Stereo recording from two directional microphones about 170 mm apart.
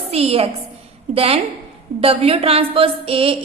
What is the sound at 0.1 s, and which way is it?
A woman's voice, 35° right (ahead or behind).